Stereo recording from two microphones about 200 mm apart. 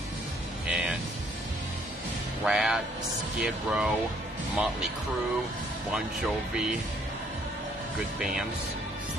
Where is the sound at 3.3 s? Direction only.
5° right (ahead or behind).